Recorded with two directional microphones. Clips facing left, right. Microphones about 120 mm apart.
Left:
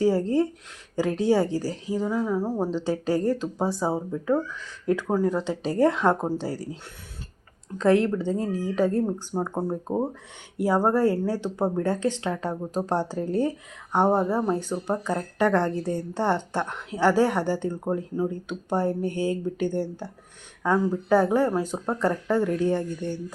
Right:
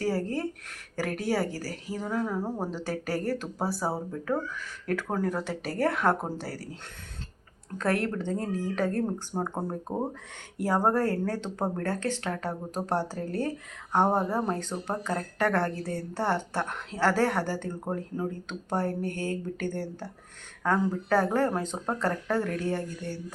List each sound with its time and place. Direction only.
0.0 s a woman's voice: 20° left (ahead or behind)
2.8 s a woman's voice: 20° left (ahead or behind)
7.8 s a woman's voice: 20° left (ahead or behind)